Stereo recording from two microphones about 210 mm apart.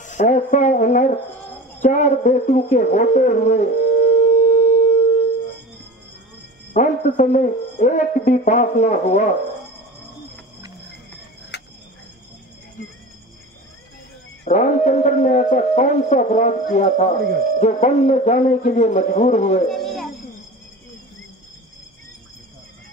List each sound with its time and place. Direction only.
0.0 s speech: 35° left (ahead or behind)
1.8 s a sound: 35° left (ahead or behind)
6.7 s speech: 35° left (ahead or behind)
11.5 s cricket: 55° left (ahead or behind)
14.5 s speech: 35° left (ahead or behind)
19.7 s a sound: centre (ahead or behind)